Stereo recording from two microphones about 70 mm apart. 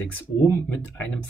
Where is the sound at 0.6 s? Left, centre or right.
Left.